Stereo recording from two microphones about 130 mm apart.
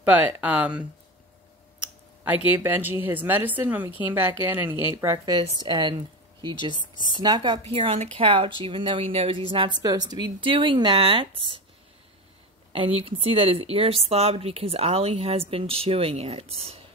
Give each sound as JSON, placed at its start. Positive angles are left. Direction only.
{"t": 0.0, "sound": "a woman's voice", "side_deg": -10}
{"t": 2.2, "sound": "a woman's voice", "side_deg": -15}
{"t": 4.9, "sound": "a woman's voice", "side_deg": -25}
{"t": 7.6, "sound": "speech", "side_deg": -50}
{"t": 9.5, "sound": "speech", "side_deg": -35}
{"t": 12.7, "sound": "speech", "side_deg": -45}